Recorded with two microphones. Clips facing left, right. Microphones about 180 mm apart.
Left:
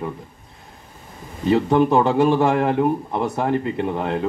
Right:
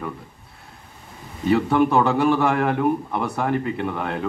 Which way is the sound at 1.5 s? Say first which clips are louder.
Left 2 dB; 20° left (ahead or behind).